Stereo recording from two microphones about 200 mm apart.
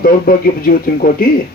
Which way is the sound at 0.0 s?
45° left (ahead or behind).